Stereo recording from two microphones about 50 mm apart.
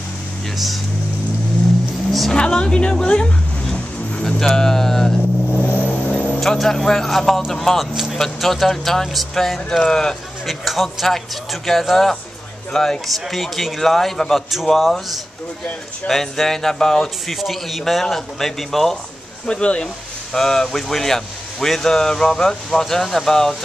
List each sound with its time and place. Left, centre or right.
2.0 s vehicle: centre
2.3 s speech: centre
3.7 s vehicle: left
4.4 s speech: centre
5.6 s vehicle: left
6.4 s a man's voice: centre
10.4 s a man's voice: centre
19.4 s speech: left
20.3 s speech: centre